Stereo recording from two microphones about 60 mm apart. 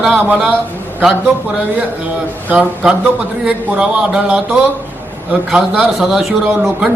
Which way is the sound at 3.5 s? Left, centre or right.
Centre.